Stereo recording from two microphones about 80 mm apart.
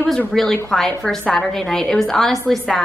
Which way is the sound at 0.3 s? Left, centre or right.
Centre.